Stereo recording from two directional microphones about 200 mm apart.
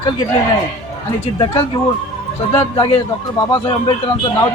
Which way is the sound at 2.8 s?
20° left (ahead or behind).